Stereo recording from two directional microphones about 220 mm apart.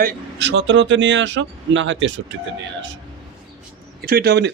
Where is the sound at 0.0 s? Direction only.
50° right (ahead or behind).